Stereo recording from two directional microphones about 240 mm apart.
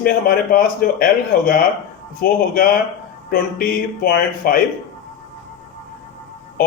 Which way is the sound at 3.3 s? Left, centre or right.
Left.